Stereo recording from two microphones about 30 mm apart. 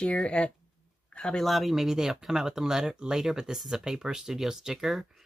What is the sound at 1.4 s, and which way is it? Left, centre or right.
Speech, centre.